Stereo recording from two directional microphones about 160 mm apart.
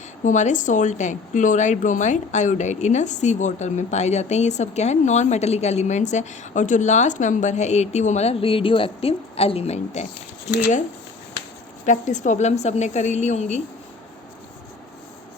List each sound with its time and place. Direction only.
0.3 s speech: 50° left (ahead or behind)
11.9 s speech: 50° left (ahead or behind)